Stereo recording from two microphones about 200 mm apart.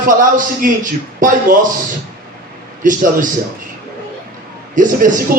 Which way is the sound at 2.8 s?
40° right (ahead or behind).